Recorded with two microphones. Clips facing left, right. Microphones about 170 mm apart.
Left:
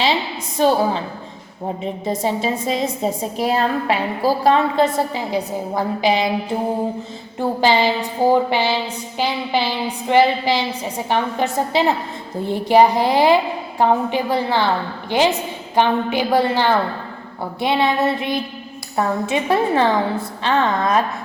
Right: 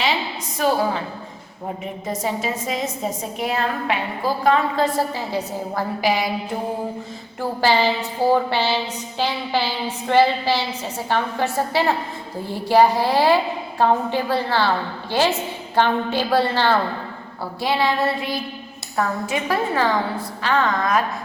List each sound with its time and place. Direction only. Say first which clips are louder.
0.6 s a woman's voice: left 4 dB; 30° left (ahead or behind)
1.8 s a woman's voice: left 4 dB; 30° left (ahead or behind)
7.3 s a woman's voice: left 3 dB; 20° left (ahead or behind)